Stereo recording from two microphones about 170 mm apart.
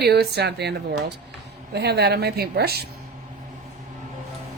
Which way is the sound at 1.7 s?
75° right (ahead or behind).